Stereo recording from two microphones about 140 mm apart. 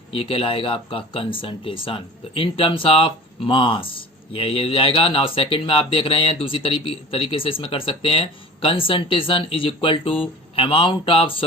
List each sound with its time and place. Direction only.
0.1 s speech: 40° left (ahead or behind)